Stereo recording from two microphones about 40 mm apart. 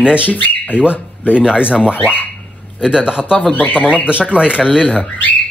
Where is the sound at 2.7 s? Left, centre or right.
Right.